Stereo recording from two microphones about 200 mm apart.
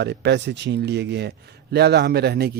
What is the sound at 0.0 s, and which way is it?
A man's voice, 60° right (ahead or behind).